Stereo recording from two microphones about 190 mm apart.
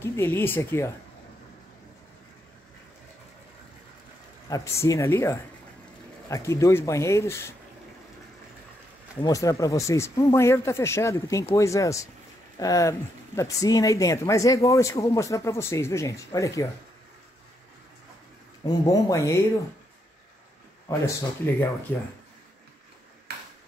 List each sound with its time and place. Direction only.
0.0 s speech: 15° left (ahead or behind)
4.5 s speech: 15° left (ahead or behind)
9.2 s speech: 20° left (ahead or behind)
18.7 s speech: 15° left (ahead or behind)
21.9 s speech: 10° left (ahead or behind)